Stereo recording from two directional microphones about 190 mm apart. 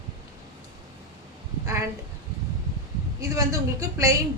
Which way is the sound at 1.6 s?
15° right (ahead or behind).